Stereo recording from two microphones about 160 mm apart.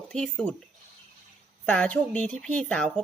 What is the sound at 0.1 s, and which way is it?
Speech, 5° left (ahead or behind).